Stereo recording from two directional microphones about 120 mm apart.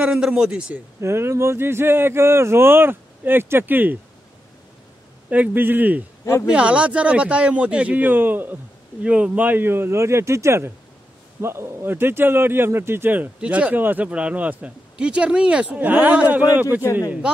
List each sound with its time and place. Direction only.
0.0 s a man's voice: 5° right (ahead or behind)
1.0 s speech: 20° right (ahead or behind)
5.3 s a man's voice: 15° right (ahead or behind)